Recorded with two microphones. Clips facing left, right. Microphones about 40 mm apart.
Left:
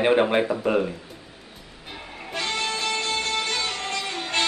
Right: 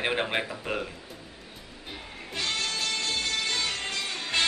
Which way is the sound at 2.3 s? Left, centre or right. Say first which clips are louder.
Left 4 dB; left.